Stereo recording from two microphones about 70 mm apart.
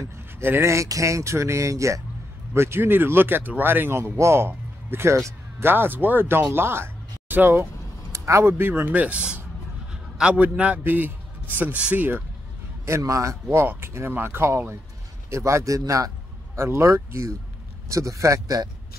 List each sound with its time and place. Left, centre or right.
0.4 s speech: right
2.5 s speech: right
8.1 s a man's voice: right
12.8 s speech: right